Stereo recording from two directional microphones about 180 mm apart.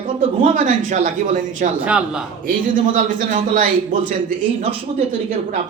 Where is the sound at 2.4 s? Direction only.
50° right (ahead or behind).